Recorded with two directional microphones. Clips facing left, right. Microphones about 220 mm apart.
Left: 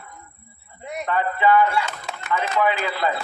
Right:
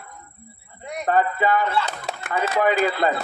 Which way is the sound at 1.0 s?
40° right (ahead or behind).